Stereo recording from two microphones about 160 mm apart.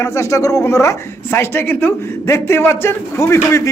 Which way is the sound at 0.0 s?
15° left (ahead or behind).